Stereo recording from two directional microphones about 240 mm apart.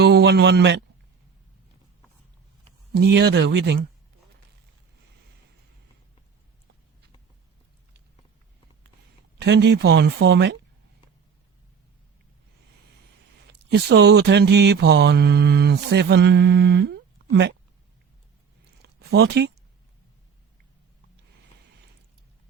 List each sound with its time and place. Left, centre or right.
0.0 s speech: right
2.9 s speech: right
9.4 s speech: right
13.5 s speech: right
18.8 s a sound: right